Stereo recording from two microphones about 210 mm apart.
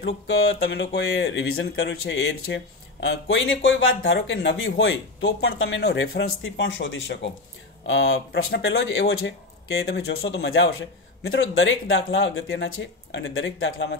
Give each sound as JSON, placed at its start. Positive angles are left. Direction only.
{"t": 0.0, "sound": "a sound", "side_deg": 60}
{"t": 1.0, "sound": "speech", "side_deg": 65}
{"t": 8.5, "sound": "speech", "side_deg": 50}
{"t": 9.8, "sound": "speech", "side_deg": 50}